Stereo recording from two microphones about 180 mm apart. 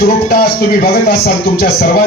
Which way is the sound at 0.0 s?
55° left (ahead or behind).